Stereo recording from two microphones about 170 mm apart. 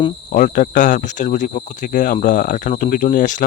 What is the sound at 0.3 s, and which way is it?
Speech, 50° left (ahead or behind).